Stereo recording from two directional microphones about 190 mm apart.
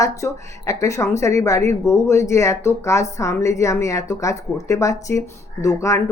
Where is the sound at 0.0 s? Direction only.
15° left (ahead or behind).